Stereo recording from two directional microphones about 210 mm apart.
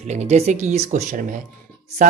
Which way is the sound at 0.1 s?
30° right (ahead or behind).